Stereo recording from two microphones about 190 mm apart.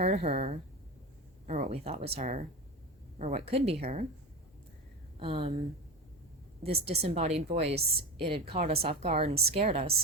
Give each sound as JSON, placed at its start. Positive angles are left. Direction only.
{"t": 0.0, "sound": "speech", "side_deg": -35}
{"t": 5.2, "sound": "speech", "side_deg": -30}
{"t": 6.6, "sound": "speech", "side_deg": -30}